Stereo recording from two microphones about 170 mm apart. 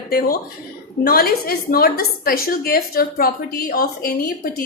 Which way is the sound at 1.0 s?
60° left (ahead or behind).